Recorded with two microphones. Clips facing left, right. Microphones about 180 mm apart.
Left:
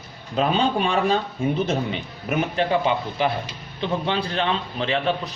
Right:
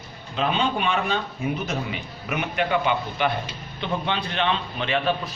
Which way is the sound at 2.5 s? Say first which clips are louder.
Even; 30° left (ahead or behind).